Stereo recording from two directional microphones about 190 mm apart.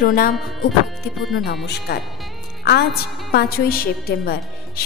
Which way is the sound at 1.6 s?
60° left (ahead or behind).